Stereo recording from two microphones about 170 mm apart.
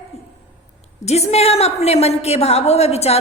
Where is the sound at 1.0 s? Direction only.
40° left (ahead or behind).